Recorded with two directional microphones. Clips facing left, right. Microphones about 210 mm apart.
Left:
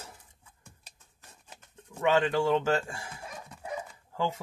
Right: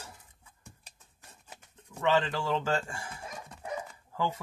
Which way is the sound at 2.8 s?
20° left (ahead or behind).